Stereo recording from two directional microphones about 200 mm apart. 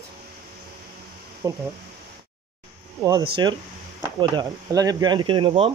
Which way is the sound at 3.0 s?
15° right (ahead or behind).